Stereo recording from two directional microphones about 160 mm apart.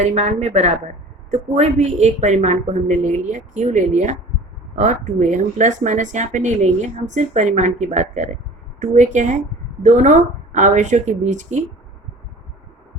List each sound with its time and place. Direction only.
0.0 s speech: 45° right (ahead or behind)